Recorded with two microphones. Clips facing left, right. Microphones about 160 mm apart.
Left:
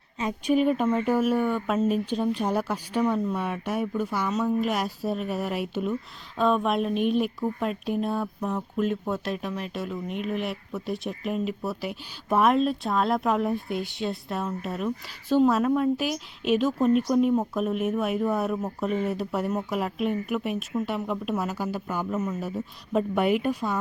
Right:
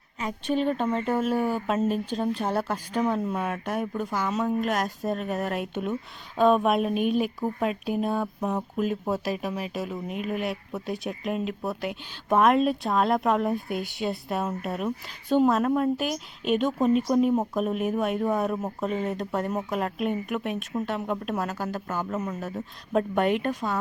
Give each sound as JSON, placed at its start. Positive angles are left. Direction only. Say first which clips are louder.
{"t": 0.2, "sound": "speech", "louder": "left 3 dB", "side_deg": 15}
{"t": 1.4, "sound": "speech", "louder": "left 1 dB", "side_deg": -30}
{"t": 1.7, "sound": "speech", "louder": "left 1 dB", "side_deg": 0}
{"t": 2.0, "sound": "speech", "louder": "left 1 dB", "side_deg": -35}
{"t": 2.4, "sound": "speech", "louder": "left 1 dB", "side_deg": 10}
{"t": 3.0, "sound": "speech", "louder": "left 1 dB", "side_deg": -5}
{"t": 4.3, "sound": "speech", "louder": "even", "side_deg": 0}
{"t": 6.3, "sound": "speech", "louder": "right 3 dB", "side_deg": -10}